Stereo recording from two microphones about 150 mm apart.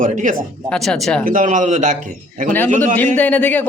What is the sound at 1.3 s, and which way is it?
Speech, 60° right (ahead or behind).